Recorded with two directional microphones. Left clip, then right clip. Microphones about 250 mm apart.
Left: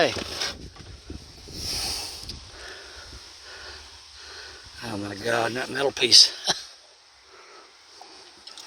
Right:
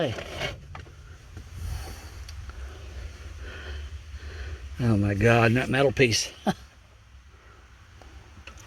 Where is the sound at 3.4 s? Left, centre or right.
Centre.